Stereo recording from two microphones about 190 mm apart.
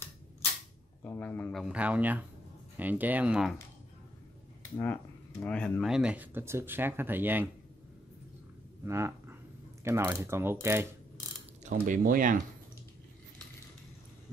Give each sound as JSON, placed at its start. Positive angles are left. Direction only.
{"t": 1.0, "sound": "speech", "side_deg": 10}
{"t": 4.7, "sound": "speech", "side_deg": 10}
{"t": 8.8, "sound": "speech", "side_deg": -15}
{"t": 11.6, "sound": "speech", "side_deg": -45}